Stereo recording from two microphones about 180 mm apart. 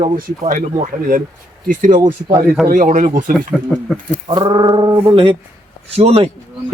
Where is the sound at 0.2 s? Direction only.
50° right (ahead or behind).